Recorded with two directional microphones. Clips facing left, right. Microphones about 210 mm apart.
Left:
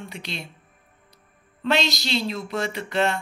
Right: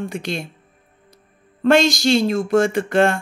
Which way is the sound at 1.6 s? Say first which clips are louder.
Right 9 dB; 50° right (ahead or behind).